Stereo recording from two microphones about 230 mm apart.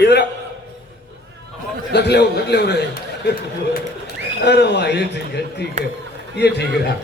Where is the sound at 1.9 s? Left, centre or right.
Left.